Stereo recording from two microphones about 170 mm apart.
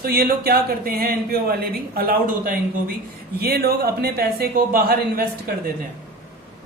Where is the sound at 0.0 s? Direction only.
60° right (ahead or behind).